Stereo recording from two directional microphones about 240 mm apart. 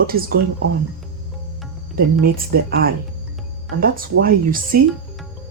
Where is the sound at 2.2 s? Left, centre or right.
Right.